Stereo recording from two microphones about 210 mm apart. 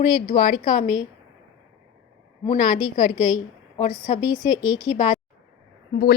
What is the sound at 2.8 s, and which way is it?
Speech, 20° left (ahead or behind).